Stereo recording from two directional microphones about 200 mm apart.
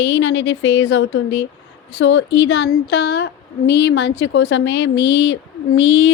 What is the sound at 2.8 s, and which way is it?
A woman's voice, 55° left (ahead or behind).